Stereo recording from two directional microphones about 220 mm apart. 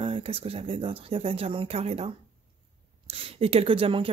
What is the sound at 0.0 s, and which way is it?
Speech, 25° right (ahead or behind).